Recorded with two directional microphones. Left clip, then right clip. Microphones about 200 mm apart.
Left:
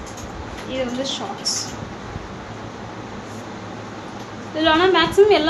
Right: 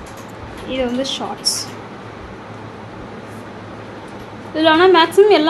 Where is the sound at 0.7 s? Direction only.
50° right (ahead or behind).